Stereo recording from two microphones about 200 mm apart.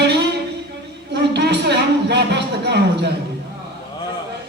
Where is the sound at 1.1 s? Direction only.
55° right (ahead or behind).